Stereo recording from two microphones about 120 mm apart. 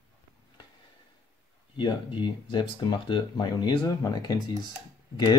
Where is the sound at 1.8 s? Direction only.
40° left (ahead or behind).